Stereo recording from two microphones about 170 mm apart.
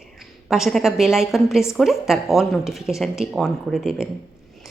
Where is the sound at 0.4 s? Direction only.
Centre (ahead or behind).